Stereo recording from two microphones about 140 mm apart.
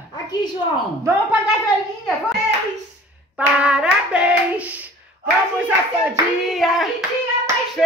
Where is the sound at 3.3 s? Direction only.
10° right (ahead or behind).